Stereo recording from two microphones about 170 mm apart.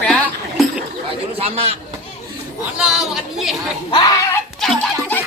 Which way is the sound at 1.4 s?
35° right (ahead or behind).